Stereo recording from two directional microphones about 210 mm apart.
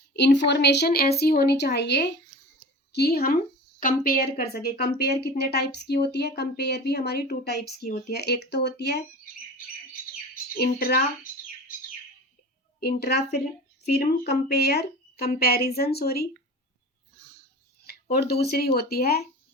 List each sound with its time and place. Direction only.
0.3 s a woman's voice: 55° left (ahead or behind)
10.5 s a woman's voice: 45° left (ahead or behind)
12.8 s a woman's voice: 50° left (ahead or behind)
17.8 s a sound: 50° left (ahead or behind)
18.4 s a woman's voice: 50° left (ahead or behind)